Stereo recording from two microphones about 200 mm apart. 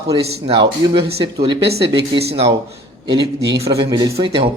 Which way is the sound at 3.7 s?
20° right (ahead or behind).